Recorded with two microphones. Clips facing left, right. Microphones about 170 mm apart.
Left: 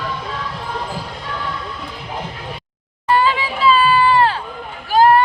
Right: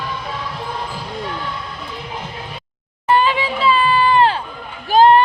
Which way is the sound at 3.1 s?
20° right (ahead or behind).